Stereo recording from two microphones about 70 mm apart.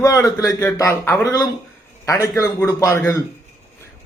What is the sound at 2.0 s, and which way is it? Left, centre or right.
A man's voice, left.